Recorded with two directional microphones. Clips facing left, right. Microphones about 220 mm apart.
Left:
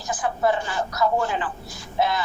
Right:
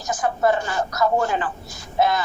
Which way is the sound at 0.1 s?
45° right (ahead or behind).